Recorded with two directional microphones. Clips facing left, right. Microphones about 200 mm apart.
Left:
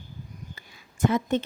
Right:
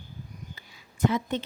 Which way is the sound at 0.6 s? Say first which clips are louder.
Left 1 dB; 50° left (ahead or behind).